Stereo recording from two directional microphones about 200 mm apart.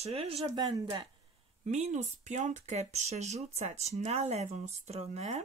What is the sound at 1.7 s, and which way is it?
Speech, 35° right (ahead or behind).